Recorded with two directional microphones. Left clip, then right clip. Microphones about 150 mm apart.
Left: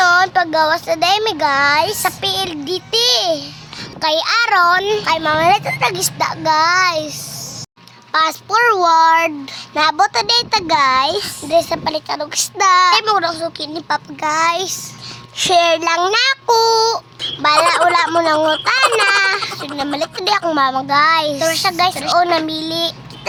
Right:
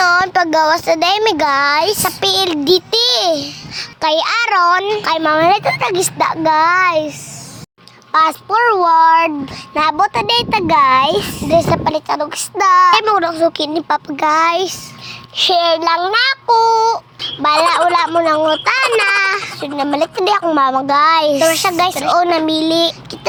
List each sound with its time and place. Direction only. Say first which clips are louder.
0.0 s a child's voice: even; 30° right (ahead or behind)
4.8 s speech: even; centre (ahead or behind)
5.0 s a child's voice: right 3 dB; 40° right (ahead or behind)
8.1 s a child's voice: right 2 dB; 10° right (ahead or behind)
13.1 s a child's voice: right 3 dB; 40° right (ahead or behind)
15.4 s a child's voice: even; 15° right (ahead or behind)
16.3 s child singing: right 2 dB; 5° left (ahead or behind)
17.4 s a child's voice: even; 20° right (ahead or behind)
18.3 s speech: right 1 dB; centre (ahead or behind)
18.6 s a child's voice: even; 25° right (ahead or behind)